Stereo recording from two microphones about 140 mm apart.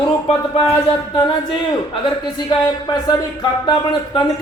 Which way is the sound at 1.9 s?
35° left (ahead or behind).